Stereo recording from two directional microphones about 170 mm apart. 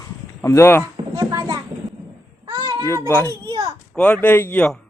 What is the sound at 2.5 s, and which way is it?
Cat, 25° right (ahead or behind).